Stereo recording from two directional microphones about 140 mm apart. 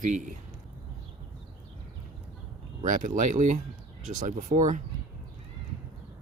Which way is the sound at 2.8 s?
70° right (ahead or behind).